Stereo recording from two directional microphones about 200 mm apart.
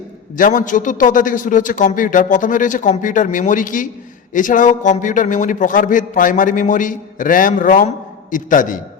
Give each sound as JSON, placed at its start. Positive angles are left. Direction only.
{"t": 0.3, "sound": "a man's voice", "side_deg": 40}